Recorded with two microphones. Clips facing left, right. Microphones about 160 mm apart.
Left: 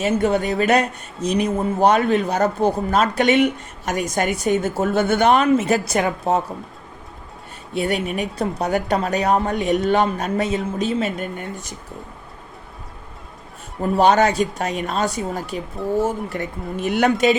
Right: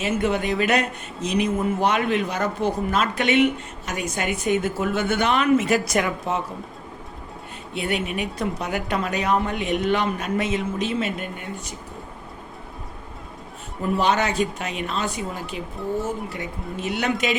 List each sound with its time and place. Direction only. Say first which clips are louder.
0.0 s speech: left 4 dB; 35° left (ahead or behind)
7.8 s speech: left 4 dB; 40° left (ahead or behind)
13.9 s speech: left 6 dB; 40° left (ahead or behind)